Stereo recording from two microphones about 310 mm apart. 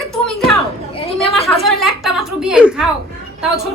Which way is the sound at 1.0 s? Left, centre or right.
Centre.